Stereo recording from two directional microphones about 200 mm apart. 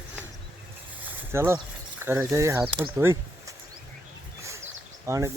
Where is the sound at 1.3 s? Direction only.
15° right (ahead or behind).